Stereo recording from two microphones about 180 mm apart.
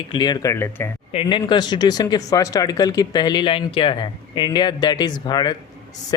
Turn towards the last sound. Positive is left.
turn(degrees=25)  # may be behind; listen again after turning